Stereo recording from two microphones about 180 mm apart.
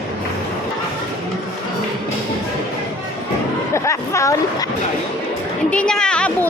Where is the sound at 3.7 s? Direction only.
15° left (ahead or behind).